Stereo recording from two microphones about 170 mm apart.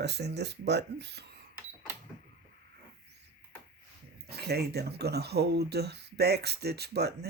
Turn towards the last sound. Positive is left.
turn(degrees=-70)  # may be behind; listen again after turning